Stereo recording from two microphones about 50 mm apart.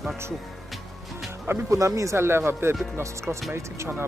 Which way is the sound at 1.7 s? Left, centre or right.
Right.